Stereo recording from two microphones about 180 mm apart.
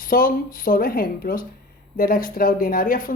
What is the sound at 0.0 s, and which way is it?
Speech, 50° left (ahead or behind).